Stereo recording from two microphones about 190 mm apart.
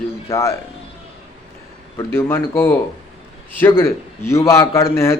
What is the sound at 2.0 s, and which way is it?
A man's voice, 15° left (ahead or behind).